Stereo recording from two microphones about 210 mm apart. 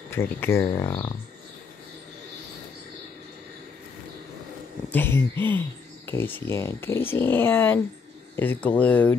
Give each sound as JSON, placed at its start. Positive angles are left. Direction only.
{"t": 0.1, "sound": "speech", "side_deg": 10}
{"t": 4.8, "sound": "speech", "side_deg": 10}